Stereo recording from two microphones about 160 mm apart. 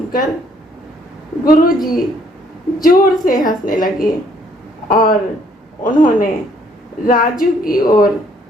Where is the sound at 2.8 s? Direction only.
60° left (ahead or behind).